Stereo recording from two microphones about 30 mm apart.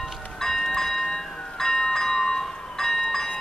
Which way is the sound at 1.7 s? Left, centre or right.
Centre.